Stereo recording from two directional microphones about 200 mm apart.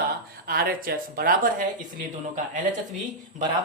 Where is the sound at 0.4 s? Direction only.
50° right (ahead or behind).